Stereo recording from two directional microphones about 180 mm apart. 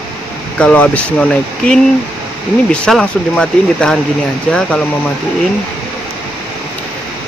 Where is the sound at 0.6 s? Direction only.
5° left (ahead or behind).